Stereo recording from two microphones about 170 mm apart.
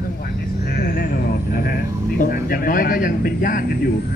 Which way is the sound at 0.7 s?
65° left (ahead or behind).